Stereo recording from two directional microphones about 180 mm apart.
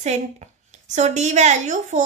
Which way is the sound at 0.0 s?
40° right (ahead or behind).